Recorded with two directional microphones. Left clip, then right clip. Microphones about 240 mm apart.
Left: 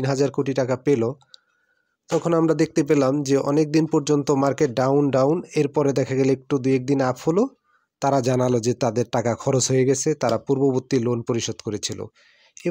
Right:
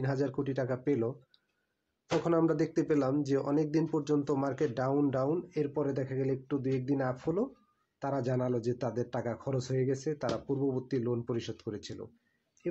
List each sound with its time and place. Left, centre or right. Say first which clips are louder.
0.0 s speech: left 11 dB; left